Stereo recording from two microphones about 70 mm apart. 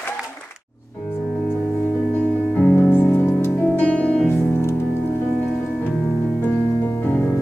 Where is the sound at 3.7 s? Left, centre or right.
Centre.